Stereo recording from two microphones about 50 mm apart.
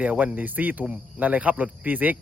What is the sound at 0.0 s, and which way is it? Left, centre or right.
Speech, right.